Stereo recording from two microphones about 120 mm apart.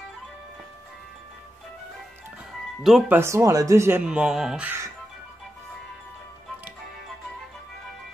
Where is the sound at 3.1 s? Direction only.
25° right (ahead or behind).